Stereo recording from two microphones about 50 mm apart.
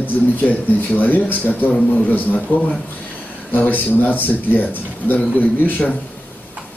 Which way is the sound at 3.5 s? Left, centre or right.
Left.